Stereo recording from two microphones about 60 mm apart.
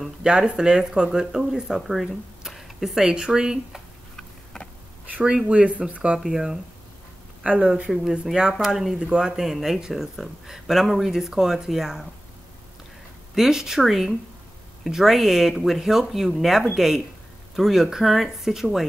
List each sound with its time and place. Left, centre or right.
0.0 s speech: centre
5.2 s speech: centre
6.1 s speech: centre
7.4 s speech: right
8.4 s speech: centre
9.0 s speech: centre
13.3 s speech: centre